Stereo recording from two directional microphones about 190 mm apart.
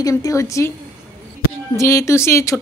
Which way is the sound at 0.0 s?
15° left (ahead or behind).